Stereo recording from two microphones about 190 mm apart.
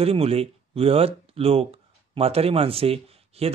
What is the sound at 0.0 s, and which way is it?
Speech, 30° right (ahead or behind).